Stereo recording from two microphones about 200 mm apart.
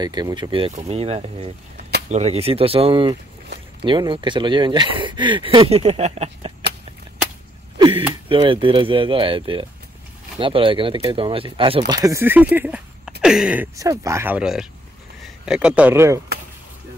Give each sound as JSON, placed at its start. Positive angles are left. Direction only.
{"t": 0.0, "sound": "speech", "side_deg": -20}
{"t": 8.3, "sound": "speech", "side_deg": -25}
{"t": 13.7, "sound": "speech", "side_deg": -15}